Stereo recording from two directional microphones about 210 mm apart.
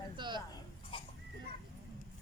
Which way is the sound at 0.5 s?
25° left (ahead or behind).